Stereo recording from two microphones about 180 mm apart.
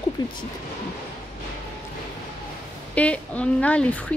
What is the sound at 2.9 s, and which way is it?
Speech, 5° left (ahead or behind).